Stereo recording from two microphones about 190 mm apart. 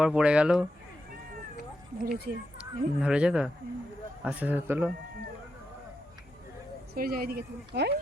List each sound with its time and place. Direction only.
0.0 s speech: 5° right (ahead or behind)
2.0 s speech: 55° right (ahead or behind)
2.6 s a man's voice: 5° right (ahead or behind)
6.9 s speech: 50° right (ahead or behind)
7.7 s speech: 60° right (ahead or behind)